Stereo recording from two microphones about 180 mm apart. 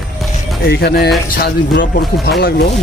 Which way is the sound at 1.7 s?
50° left (ahead or behind).